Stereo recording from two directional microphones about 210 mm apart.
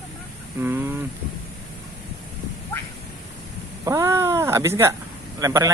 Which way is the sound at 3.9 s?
15° right (ahead or behind).